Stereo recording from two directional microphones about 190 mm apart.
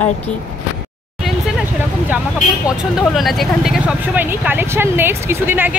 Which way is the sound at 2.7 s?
Centre (ahead or behind).